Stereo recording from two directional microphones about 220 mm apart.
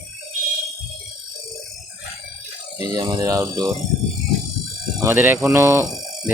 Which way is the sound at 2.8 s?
20° right (ahead or behind).